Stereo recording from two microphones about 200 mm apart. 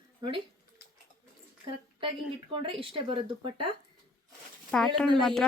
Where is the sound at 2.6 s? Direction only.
25° right (ahead or behind).